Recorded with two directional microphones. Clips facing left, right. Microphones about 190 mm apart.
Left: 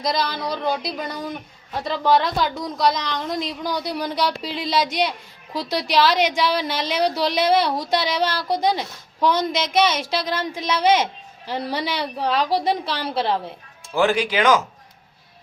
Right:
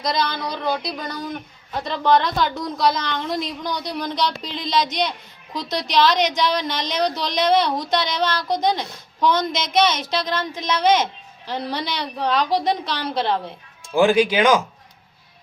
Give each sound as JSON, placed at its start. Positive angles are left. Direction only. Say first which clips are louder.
{"t": 0.0, "sound": "a woman's voice", "louder": "even", "side_deg": 5}
{"t": 13.9, "sound": "speech", "louder": "right 4 dB", "side_deg": -15}